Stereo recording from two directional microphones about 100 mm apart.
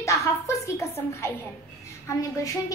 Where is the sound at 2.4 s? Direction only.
35° left (ahead or behind).